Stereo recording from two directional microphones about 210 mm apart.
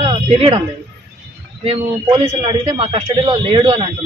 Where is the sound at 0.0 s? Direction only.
30° right (ahead or behind).